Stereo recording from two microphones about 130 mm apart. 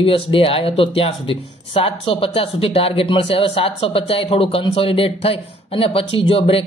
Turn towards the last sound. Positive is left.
turn(degrees=45)  # may be behind; listen again after turning